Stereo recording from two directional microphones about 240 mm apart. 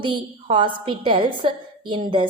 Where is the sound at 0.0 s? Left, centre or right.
Centre.